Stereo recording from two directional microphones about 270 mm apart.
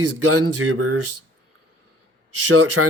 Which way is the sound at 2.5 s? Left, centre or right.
Right.